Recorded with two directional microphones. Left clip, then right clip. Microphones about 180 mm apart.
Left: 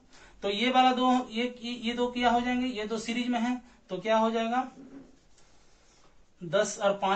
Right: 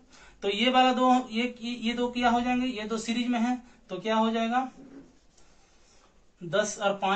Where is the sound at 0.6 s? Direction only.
20° right (ahead or behind).